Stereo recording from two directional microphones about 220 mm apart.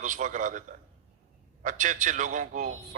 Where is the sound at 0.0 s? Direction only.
35° right (ahead or behind).